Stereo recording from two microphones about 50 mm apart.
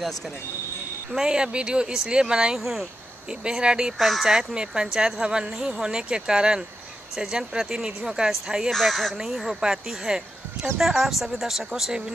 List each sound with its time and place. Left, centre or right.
1.1 s a woman's voice: centre
3.4 s a woman's voice: centre
4.0 s speech: centre
4.3 s a woman's voice: centre
8.7 s a woman's voice: centre